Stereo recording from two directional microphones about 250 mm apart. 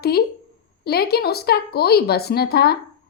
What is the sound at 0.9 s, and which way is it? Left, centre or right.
A woman's voice, left.